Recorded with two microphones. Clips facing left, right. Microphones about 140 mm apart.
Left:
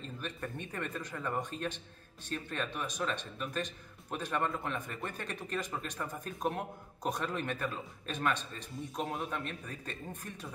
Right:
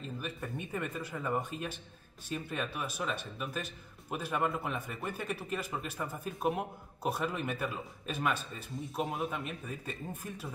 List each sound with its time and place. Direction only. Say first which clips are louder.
0.0 s speech: right 1 dB; 10° right (ahead or behind)